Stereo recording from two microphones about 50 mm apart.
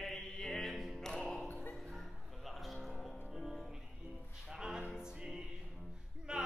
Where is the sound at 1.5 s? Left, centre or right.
Left.